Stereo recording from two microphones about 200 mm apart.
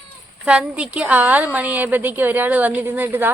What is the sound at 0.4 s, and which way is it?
A woman's voice, 5° right (ahead or behind).